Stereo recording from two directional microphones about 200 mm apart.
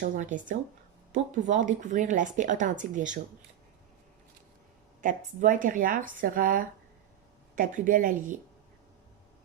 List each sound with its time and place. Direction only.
0.0 s speech: 40° right (ahead or behind)
5.0 s speech: 40° right (ahead or behind)